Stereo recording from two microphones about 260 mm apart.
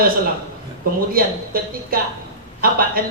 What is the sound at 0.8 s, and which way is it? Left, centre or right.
Speech, right.